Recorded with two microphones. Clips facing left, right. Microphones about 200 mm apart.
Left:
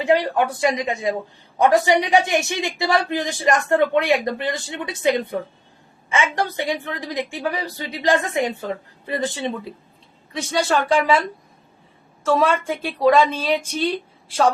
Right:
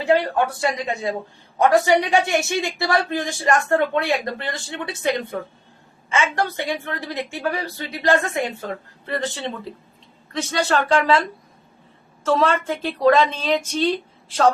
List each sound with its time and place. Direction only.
0.0 s speech: 15° left (ahead or behind)
12.2 s speech: 10° left (ahead or behind)